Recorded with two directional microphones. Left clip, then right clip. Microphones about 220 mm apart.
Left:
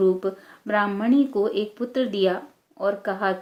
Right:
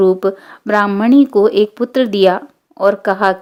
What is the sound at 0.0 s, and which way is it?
Speech, 45° right (ahead or behind).